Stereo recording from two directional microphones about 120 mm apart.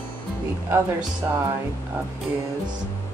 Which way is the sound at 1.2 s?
20° right (ahead or behind).